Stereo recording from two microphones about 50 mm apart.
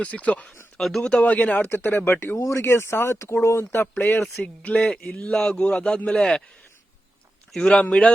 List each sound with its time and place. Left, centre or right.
0.0 s speech: left
0.8 s speech: centre
1.2 s speech: left
2.0 s speech: left
2.4 s speech: left
3.6 s speech: left
5.3 s a man's voice: centre
7.6 s speech: left